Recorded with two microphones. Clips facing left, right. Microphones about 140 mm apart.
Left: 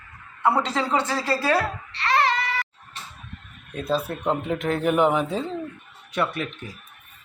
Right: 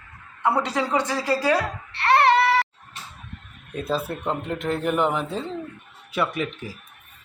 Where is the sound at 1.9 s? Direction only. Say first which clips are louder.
Right 5 dB; 60° right (ahead or behind).